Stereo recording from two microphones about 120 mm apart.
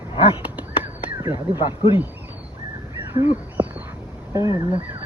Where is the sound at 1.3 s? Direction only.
40° left (ahead or behind).